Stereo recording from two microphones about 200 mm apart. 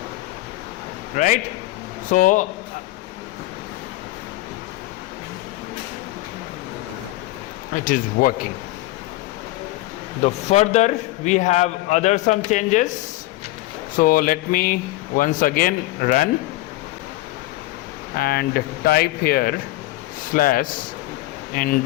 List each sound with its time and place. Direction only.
1.1 s a man's voice: 40° left (ahead or behind)
7.9 s speech: 40° left (ahead or behind)
10.2 s a man's voice: 35° left (ahead or behind)
13.9 s speech: 45° left (ahead or behind)
18.2 s speech: 50° left (ahead or behind)